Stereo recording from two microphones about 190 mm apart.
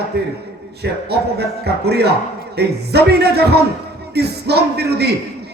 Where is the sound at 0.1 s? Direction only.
60° right (ahead or behind).